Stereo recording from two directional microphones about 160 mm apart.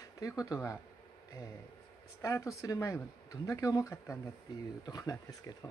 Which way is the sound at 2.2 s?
20° left (ahead or behind).